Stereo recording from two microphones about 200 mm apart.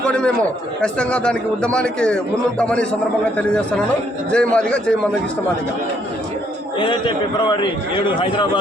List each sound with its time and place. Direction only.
0.8 s a man's voice: 5° left (ahead or behind)
7.5 s a man's voice: 25° left (ahead or behind)